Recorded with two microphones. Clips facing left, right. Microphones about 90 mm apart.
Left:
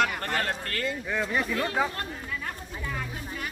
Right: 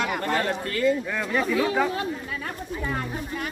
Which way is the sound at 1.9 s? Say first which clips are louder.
Right 6 dB; 90° right.